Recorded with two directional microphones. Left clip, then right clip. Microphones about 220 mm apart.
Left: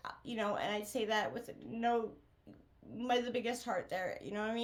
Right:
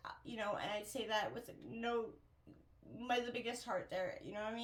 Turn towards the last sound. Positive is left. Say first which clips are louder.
# left 6 dB
turn(degrees=45)  # may be behind; listen again after turning